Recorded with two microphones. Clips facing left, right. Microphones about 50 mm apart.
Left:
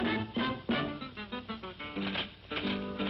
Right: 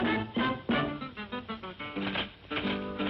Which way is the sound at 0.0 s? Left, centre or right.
Centre.